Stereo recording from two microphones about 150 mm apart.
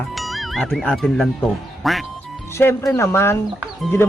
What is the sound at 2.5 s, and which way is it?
Speech, 15° left (ahead or behind).